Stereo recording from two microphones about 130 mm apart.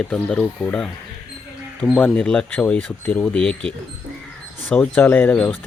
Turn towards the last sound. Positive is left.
turn(degrees=10)  # may be behind; listen again after turning